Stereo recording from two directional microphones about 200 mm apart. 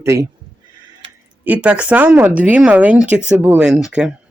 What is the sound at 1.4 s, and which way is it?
Speech, 5° right (ahead or behind).